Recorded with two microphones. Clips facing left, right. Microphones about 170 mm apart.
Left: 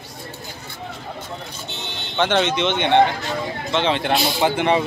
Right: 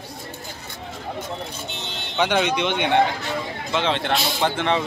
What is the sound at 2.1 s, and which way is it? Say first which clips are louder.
A man's voice: left 1 dB; 5° right (ahead or behind).